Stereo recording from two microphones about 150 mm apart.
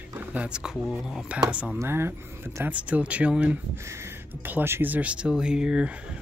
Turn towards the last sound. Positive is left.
turn(degrees=-5)  # may be behind; listen again after turning